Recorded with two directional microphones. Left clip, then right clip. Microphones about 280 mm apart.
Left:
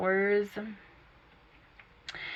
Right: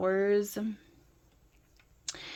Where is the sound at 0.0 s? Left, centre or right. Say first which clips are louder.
Even; right.